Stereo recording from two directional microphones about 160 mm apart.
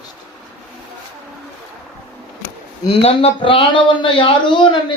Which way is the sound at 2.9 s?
40° left (ahead or behind).